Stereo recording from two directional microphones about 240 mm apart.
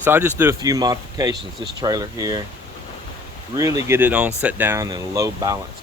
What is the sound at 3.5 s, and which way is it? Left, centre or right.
Speech, centre.